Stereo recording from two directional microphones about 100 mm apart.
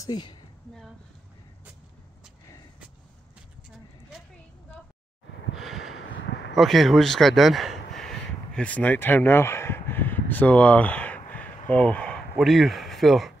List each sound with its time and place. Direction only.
0.0 s a woman's voice: 50° left (ahead or behind)
5.6 s a sound: centre (ahead or behind)
12.4 s speech: centre (ahead or behind)